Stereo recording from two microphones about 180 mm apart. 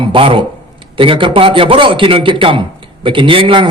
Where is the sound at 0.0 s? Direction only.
30° right (ahead or behind).